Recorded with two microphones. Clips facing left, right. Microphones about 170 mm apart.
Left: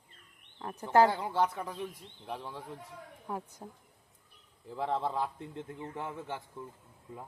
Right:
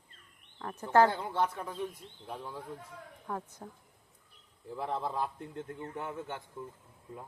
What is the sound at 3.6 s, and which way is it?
Speech, 20° left (ahead or behind).